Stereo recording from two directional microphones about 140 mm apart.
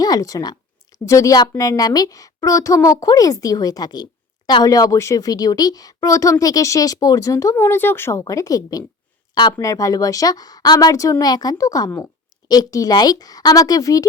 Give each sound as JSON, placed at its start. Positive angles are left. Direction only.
{"t": 0.0, "sound": "a woman's voice", "side_deg": 25}